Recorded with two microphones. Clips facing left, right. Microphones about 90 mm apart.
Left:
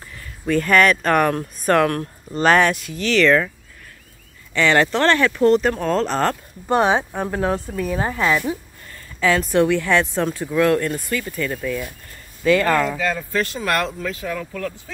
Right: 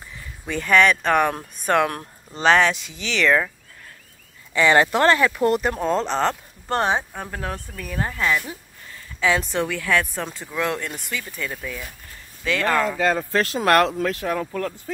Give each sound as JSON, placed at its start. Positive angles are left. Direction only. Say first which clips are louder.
{"t": 0.5, "sound": "speech", "louder": "left 2 dB", "side_deg": 0}
{"t": 4.6, "sound": "speech", "louder": "even", "side_deg": -15}
{"t": 6.8, "sound": "speech", "louder": "left 4 dB", "side_deg": 15}
{"t": 7.1, "sound": "speech", "louder": "left 9 dB", "side_deg": 25}
{"t": 9.2, "sound": "speech", "louder": "left 4 dB", "side_deg": 0}
{"t": 9.7, "sound": "speech", "louder": "left 4 dB", "side_deg": 15}
{"t": 10.5, "sound": "speech", "louder": "left 8 dB", "side_deg": -5}
{"t": 13.0, "sound": "speech", "louder": "right 2 dB", "side_deg": -35}
{"t": 13.4, "sound": "speech", "louder": "right 4 dB", "side_deg": -55}
{"t": 14.2, "sound": "speech", "louder": "right 2 dB", "side_deg": -30}